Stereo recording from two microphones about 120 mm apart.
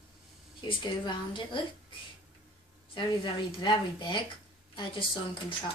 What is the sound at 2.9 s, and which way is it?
A woman's voice, 40° left (ahead or behind).